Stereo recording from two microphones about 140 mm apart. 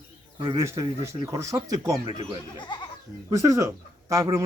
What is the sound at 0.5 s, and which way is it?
Speech, 20° right (ahead or behind).